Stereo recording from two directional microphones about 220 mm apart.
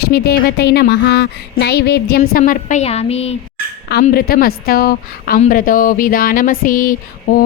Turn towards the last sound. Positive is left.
turn(degrees=40)  # may be behind; listen again after turning